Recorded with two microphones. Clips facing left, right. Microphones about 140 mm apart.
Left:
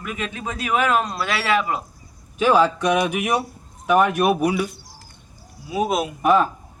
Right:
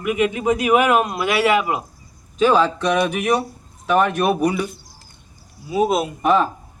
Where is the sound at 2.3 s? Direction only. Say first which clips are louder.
Right 1 dB; 10° left (ahead or behind).